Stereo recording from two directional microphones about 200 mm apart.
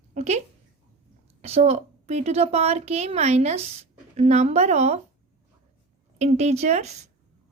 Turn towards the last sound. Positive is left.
turn(degrees=-35)  # may be behind; listen again after turning